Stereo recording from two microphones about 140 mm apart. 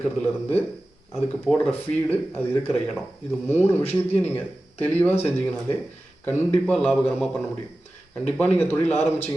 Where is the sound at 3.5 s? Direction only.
15° left (ahead or behind).